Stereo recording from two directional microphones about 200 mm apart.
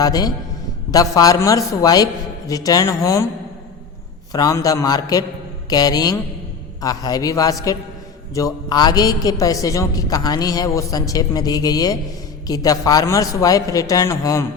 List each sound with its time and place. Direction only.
0.0 s a man's voice: 20° left (ahead or behind)
4.3 s a man's voice: 20° left (ahead or behind)